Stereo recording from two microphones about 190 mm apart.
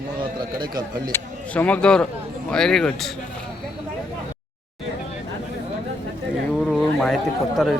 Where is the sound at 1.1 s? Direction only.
10° left (ahead or behind).